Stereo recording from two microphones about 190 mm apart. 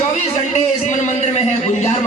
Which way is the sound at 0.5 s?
40° left (ahead or behind).